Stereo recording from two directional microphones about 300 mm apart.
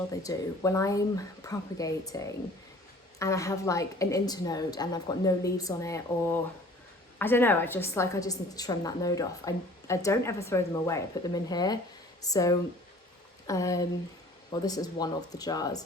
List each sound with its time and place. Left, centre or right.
0.1 s a woman's voice: centre